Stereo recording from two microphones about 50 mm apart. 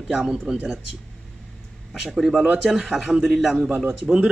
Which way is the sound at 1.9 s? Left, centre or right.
Centre.